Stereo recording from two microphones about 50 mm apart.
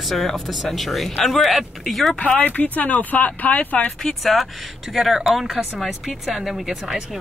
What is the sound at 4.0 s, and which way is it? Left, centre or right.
Speech, centre.